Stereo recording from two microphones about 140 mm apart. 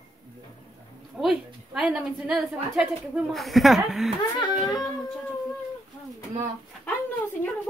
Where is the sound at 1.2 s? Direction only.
5° right (ahead or behind).